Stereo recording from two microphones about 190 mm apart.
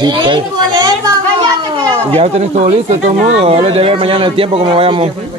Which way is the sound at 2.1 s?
35° right (ahead or behind).